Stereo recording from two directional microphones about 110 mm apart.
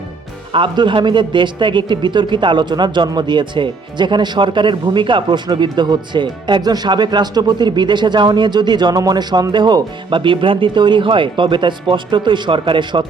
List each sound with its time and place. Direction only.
0.5 s a man's voice: 50° right (ahead or behind)